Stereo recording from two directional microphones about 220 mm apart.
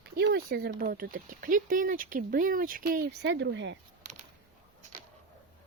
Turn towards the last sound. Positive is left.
turn(degrees=-55)  # may be behind; listen again after turning